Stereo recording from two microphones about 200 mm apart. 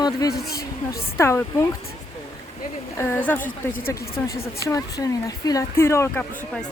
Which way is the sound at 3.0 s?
10° left (ahead or behind).